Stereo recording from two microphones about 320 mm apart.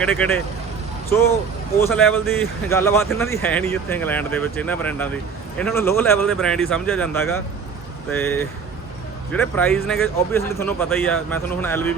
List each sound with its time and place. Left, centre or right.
0.0 s speech: centre
1.8 s speech: centre